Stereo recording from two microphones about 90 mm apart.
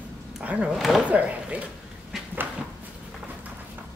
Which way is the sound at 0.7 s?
Centre (ahead or behind).